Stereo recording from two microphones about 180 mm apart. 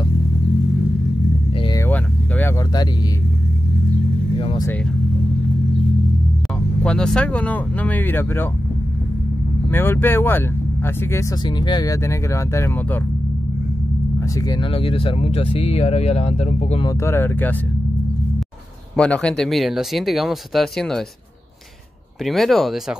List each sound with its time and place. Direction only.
1.9 s vehicle: 10° left (ahead or behind)
4.4 s vehicle: 30° left (ahead or behind)
6.8 s speech: 5° left (ahead or behind)
9.7 s speech: 10° left (ahead or behind)
11.4 s speech: 25° left (ahead or behind)
14.3 s speech: 25° left (ahead or behind)
16.8 s speech: 15° left (ahead or behind)
18.9 s speech: 5° left (ahead or behind)
22.2 s speech: centre (ahead or behind)